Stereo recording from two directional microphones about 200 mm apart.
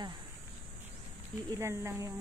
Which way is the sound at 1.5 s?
15° right (ahead or behind).